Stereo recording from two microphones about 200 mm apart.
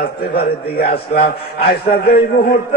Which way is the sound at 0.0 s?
50° left (ahead or behind).